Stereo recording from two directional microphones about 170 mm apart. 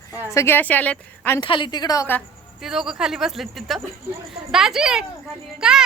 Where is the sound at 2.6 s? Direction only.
5° right (ahead or behind).